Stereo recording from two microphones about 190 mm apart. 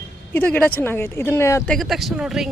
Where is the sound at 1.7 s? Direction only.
Centre (ahead or behind).